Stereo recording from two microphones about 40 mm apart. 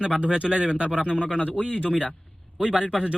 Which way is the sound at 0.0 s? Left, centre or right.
Right.